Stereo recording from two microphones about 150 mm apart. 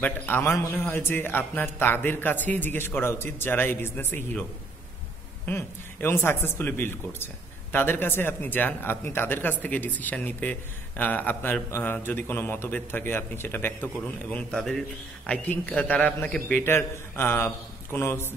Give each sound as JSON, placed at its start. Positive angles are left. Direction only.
{"t": 0.0, "sound": "speech", "side_deg": 15}